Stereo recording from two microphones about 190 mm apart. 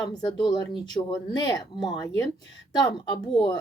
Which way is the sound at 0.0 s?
20° left (ahead or behind).